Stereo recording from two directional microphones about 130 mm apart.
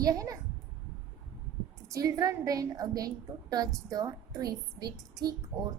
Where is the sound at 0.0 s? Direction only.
25° right (ahead or behind).